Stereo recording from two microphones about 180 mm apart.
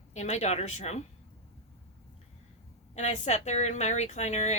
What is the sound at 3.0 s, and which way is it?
A woman's voice, 40° left (ahead or behind).